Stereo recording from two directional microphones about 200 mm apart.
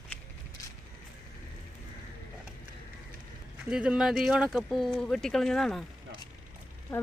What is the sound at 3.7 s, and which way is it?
Speech, 5° right (ahead or behind).